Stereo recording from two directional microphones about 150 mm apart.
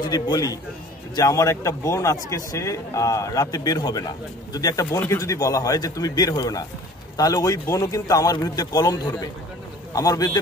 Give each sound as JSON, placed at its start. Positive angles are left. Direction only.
{"t": 0.0, "sound": "speech", "side_deg": 25}